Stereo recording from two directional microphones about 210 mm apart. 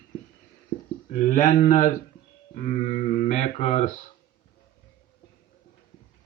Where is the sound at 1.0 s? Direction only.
35° left (ahead or behind).